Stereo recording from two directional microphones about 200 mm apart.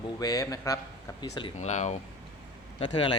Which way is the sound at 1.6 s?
35° left (ahead or behind).